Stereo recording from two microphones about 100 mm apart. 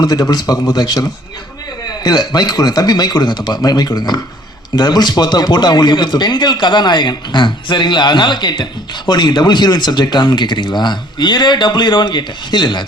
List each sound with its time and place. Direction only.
0.0 s a man's voice: 40° left (ahead or behind)